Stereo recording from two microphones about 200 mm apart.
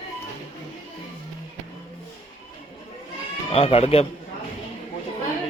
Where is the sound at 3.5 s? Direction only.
30° left (ahead or behind).